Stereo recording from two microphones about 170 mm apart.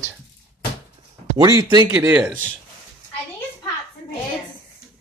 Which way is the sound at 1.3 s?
20° right (ahead or behind).